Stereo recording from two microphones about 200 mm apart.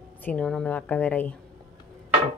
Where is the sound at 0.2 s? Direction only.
5° left (ahead or behind).